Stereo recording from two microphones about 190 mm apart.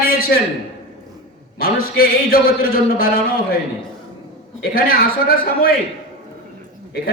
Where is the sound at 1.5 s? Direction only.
50° left (ahead or behind).